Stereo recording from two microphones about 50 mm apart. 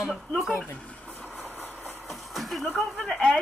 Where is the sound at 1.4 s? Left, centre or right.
Left.